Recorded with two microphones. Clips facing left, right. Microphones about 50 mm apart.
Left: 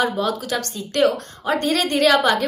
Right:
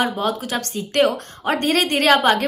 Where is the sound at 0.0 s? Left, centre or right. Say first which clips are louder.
Even; right.